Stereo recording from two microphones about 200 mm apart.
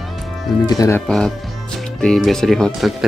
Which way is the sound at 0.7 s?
15° left (ahead or behind).